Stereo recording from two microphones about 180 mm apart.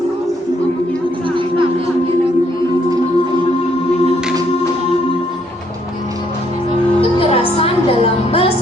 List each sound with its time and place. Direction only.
7.0 s music: 30° left (ahead or behind)